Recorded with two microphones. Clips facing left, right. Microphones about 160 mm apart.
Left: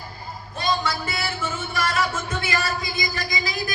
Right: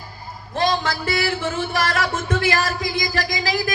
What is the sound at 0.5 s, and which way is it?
Music, 90° right.